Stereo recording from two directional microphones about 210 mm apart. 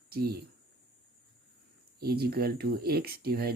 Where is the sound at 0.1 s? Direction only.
45° right (ahead or behind).